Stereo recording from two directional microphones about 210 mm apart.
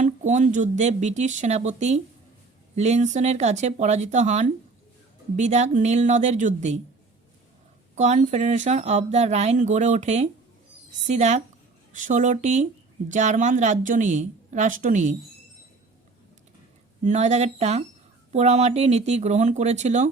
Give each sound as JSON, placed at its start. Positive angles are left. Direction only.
{"t": 0.0, "sound": "speech", "side_deg": -35}
{"t": 7.9, "sound": "speech", "side_deg": -35}
{"t": 17.0, "sound": "speech", "side_deg": -35}